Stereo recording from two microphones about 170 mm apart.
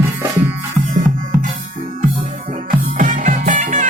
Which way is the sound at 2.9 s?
50° right (ahead or behind).